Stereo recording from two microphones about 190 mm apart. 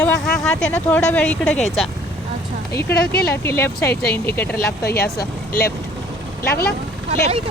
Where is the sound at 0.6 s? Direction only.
5° left (ahead or behind).